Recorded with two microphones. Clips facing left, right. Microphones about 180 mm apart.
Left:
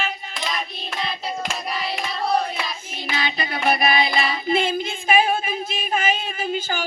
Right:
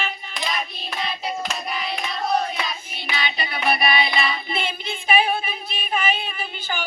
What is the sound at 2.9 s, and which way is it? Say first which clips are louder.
Child singing: left 2 dB; 45° left (ahead or behind).